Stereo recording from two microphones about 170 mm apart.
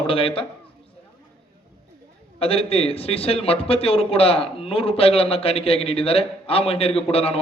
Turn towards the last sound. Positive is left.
turn(degrees=35)  # may be behind; listen again after turning